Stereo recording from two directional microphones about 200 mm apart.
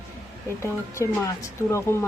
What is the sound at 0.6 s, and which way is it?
Speech, 15° left (ahead or behind).